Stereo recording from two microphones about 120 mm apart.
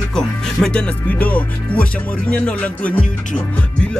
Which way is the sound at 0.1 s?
5° left (ahead or behind).